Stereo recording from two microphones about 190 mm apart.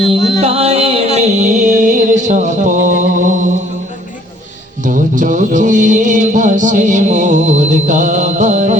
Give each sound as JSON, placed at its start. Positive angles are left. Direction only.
{"t": 0.3, "sound": "music", "side_deg": -30}
{"t": 4.8, "sound": "music", "side_deg": -45}